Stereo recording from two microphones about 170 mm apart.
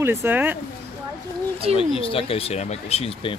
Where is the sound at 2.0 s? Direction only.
35° left (ahead or behind).